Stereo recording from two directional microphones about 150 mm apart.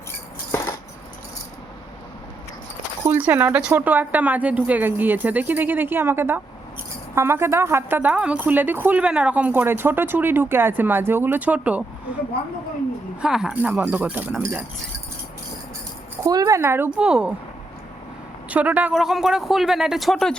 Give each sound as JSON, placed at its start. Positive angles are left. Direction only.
{"t": 3.1, "sound": "speech", "side_deg": -10}
{"t": 13.2, "sound": "speech", "side_deg": -5}
{"t": 16.2, "sound": "speech", "side_deg": -25}
{"t": 18.4, "sound": "speech", "side_deg": -10}